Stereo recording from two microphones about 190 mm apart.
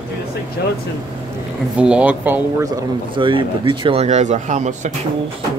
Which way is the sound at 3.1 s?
25° right (ahead or behind).